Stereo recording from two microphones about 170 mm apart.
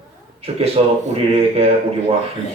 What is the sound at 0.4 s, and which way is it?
Speech, 35° right (ahead or behind).